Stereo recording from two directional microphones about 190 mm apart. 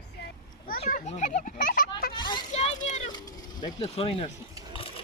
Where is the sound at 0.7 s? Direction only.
50° left (ahead or behind).